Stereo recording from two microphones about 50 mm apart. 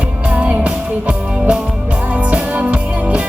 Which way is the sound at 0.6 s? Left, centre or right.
Right.